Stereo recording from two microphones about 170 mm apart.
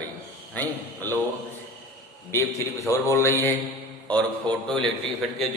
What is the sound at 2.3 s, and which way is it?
Speech, 15° left (ahead or behind).